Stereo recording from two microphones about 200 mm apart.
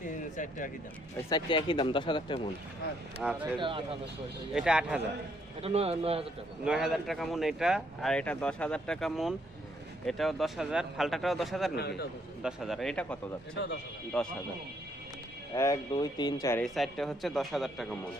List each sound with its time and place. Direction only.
0.0 s a sound: 40° left (ahead or behind)
1.3 s speech: 25° left (ahead or behind)
3.2 s speech: 5° right (ahead or behind)
3.6 s speech: 25° right (ahead or behind)
4.5 s speech: 5° right (ahead or behind)
5.6 s speech: 30° right (ahead or behind)
6.7 s speech: 5° right (ahead or behind)
11.8 s a man's voice: 55° left (ahead or behind)
12.4 s speech: 5° right (ahead or behind)
14.1 s speech: 5° left (ahead or behind)
15.5 s speech: 15° left (ahead or behind)
16.6 s speech: centre (ahead or behind)